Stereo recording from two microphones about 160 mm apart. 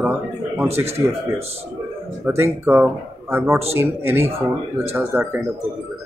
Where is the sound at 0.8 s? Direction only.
40° right (ahead or behind).